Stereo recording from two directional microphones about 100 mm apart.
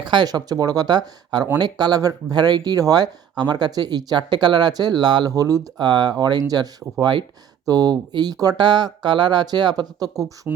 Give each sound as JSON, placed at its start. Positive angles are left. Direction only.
{"t": 0.0, "sound": "speech", "side_deg": -50}